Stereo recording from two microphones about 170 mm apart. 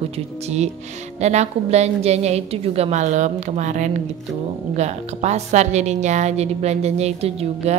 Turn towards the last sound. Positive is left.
turn(degrees=-40)  # may be behind; listen again after turning